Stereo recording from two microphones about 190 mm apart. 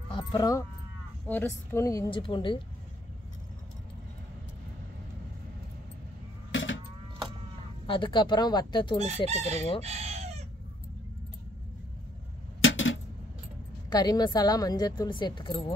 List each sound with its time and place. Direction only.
0.1 s a sound: 20° left (ahead or behind)
1.2 s a woman's voice: 10° left (ahead or behind); by 2.6 s 25° left (ahead or behind)
6.5 s moo: 80° left
7.8 s speech: 25° left (ahead or behind)
9.0 s chicken: 35° right (ahead or behind)
12.6 s a sound: 85° left
13.8 s speech: 20° left (ahead or behind)